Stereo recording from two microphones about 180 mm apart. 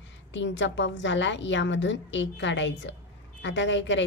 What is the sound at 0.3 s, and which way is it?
A woman's voice, 90° left.